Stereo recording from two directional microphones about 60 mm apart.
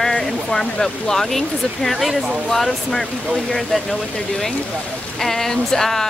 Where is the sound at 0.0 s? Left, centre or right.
Centre.